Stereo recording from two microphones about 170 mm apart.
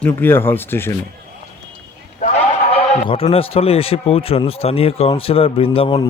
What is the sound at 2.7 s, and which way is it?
A man's voice, 35° left (ahead or behind).